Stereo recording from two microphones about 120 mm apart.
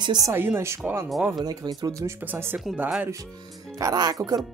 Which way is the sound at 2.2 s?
15° right (ahead or behind).